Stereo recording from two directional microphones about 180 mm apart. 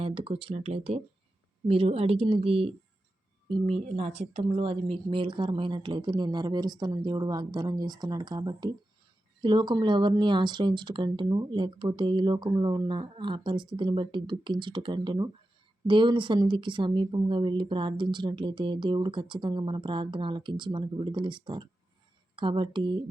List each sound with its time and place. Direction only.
0.0 s speech: 30° right (ahead or behind)